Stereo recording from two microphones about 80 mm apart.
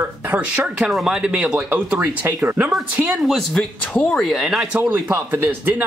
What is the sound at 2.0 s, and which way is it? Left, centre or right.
Speech, right.